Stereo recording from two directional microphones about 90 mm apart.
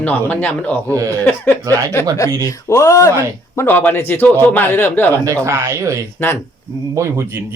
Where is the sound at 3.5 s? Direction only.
25° left (ahead or behind).